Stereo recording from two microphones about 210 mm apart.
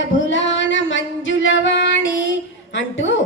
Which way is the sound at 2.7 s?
60° left (ahead or behind).